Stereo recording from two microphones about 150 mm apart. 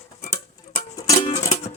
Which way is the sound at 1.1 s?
50° left (ahead or behind).